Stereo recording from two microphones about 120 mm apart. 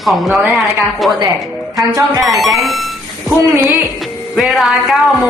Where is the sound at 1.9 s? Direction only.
30° right (ahead or behind).